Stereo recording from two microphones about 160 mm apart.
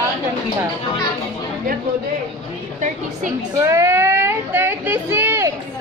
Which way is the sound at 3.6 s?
20° right (ahead or behind).